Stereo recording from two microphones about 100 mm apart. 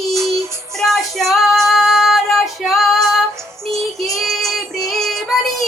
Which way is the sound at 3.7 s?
Centre (ahead or behind).